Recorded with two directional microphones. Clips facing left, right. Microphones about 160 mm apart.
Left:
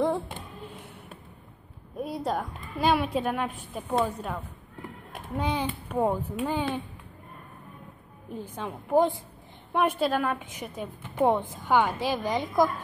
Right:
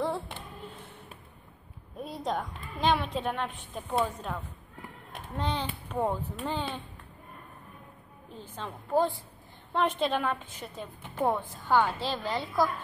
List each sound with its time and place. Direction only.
2.0 s a woman's voice: 10° left (ahead or behind)
8.3 s a woman's voice: 15° left (ahead or behind)